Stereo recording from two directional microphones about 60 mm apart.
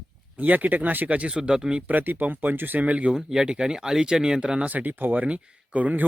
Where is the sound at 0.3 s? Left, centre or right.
Right; by 1.8 s centre.